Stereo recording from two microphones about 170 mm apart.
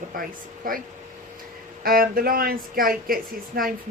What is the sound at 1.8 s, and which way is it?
Speech, 60° right (ahead or behind).